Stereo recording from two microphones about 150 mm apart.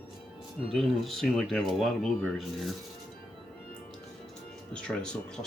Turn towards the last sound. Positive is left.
turn(degrees=5)  # may be behind; listen again after turning